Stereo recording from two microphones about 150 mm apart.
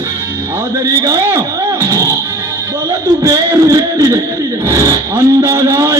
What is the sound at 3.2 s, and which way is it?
Music, 20° right (ahead or behind).